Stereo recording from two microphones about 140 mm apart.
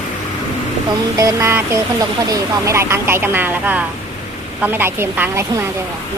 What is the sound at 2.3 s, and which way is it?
Speech, 20° right (ahead or behind).